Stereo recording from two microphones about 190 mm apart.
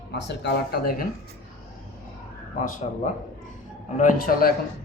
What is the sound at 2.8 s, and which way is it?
Speech, 35° left (ahead or behind).